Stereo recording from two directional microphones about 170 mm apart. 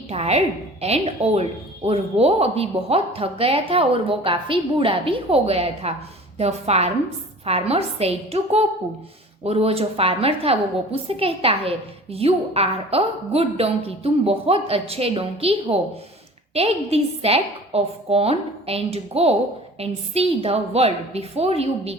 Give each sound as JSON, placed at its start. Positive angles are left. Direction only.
{"t": 0.1, "sound": "a woman's voice", "side_deg": -40}